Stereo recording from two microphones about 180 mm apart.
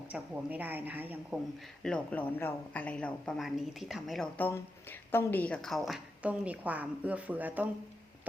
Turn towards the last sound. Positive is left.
turn(degrees=-10)  # may be behind; listen again after turning